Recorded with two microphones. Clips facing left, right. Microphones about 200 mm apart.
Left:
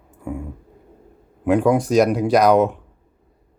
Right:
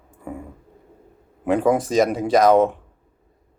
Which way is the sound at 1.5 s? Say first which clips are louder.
Left 2 dB; 5° right (ahead or behind).